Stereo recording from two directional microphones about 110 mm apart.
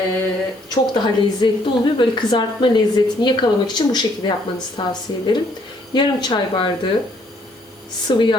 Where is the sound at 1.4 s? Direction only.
45° left (ahead or behind).